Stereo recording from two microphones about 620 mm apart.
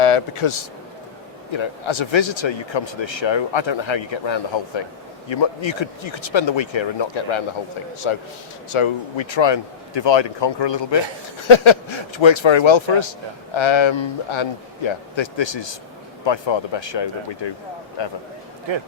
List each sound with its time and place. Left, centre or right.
0.0 s speech: left
8.7 s speech: left
18.7 s speech: right